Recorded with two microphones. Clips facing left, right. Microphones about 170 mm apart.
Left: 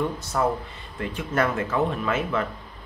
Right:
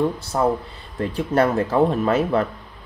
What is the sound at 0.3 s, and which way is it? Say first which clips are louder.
Speech: right 2 dB; 35° right (ahead or behind).